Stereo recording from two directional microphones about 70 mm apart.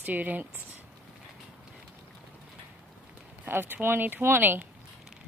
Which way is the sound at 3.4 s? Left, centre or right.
Right.